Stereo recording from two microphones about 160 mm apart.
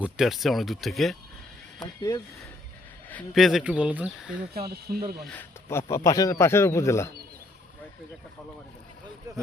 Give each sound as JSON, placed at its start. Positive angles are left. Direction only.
{"t": 0.0, "sound": "speech", "side_deg": 0}
{"t": 2.0, "sound": "speech", "side_deg": 25}
{"t": 3.3, "sound": "speech", "side_deg": 0}
{"t": 4.5, "sound": "speech", "side_deg": -75}
{"t": 5.3, "sound": "speech", "side_deg": 15}